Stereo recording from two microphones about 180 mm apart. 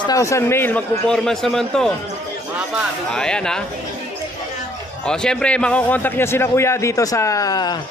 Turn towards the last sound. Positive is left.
turn(degrees=20)  # may be behind; listen again after turning